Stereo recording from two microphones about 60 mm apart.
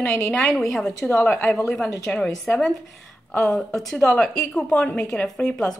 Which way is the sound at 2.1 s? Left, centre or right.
Centre.